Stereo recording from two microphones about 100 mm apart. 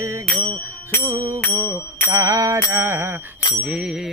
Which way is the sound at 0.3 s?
55° right (ahead or behind).